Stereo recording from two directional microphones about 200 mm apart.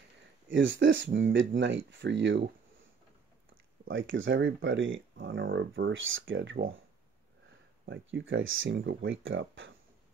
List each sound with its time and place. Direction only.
0.5 s speech: 70° right (ahead or behind)
3.8 s speech: 75° right (ahead or behind)
7.8 s speech: 70° right (ahead or behind)
8.7 s speech: 70° right (ahead or behind)